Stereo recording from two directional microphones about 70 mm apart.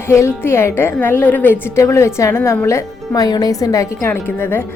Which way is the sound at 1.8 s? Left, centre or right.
Left.